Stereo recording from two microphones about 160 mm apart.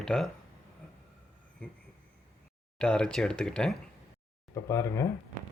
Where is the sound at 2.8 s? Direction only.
5° left (ahead or behind).